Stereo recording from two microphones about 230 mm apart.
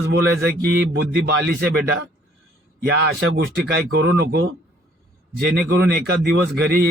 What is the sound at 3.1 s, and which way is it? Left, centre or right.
Speech, right.